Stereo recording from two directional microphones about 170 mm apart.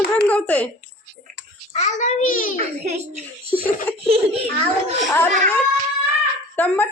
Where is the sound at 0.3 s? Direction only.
10° left (ahead or behind).